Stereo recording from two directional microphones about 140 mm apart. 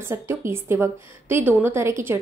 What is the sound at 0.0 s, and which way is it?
A woman's voice, 15° right (ahead or behind).